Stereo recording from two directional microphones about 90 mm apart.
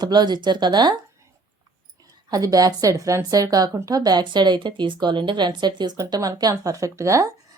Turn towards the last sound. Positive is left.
turn(degrees=-35)  # may be behind; listen again after turning